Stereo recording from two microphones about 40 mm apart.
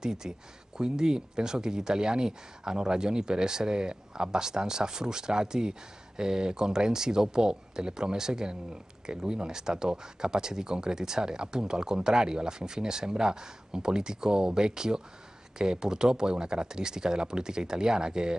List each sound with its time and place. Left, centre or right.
0.0 s speech: centre